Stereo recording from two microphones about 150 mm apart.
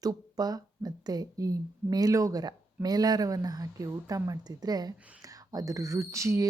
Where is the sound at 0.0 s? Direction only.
25° right (ahead or behind).